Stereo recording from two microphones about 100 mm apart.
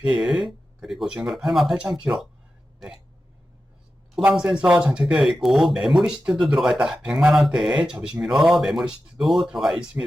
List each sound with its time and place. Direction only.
0.0 s speech: 5° right (ahead or behind)
4.2 s speech: 15° right (ahead or behind)